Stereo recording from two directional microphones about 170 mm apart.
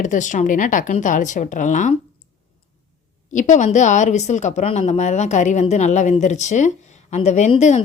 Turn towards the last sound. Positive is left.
turn(degrees=40)  # may be behind; listen again after turning